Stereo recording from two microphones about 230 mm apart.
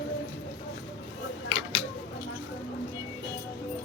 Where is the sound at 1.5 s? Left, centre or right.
Left.